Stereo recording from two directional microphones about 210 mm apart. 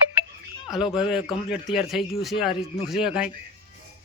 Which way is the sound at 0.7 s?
Centre (ahead or behind).